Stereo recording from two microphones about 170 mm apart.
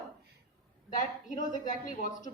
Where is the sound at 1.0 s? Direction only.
50° left (ahead or behind).